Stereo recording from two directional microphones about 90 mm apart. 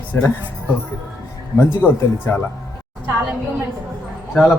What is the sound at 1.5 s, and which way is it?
Speech, 25° left (ahead or behind).